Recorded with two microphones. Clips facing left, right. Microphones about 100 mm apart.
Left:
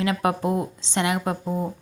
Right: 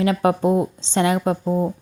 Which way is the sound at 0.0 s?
30° right (ahead or behind).